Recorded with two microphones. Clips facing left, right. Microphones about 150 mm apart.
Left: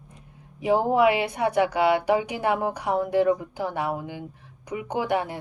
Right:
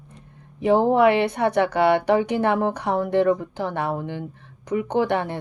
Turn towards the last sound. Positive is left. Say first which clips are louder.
# right 4 dB
turn(degrees=10)  # may be behind; listen again after turning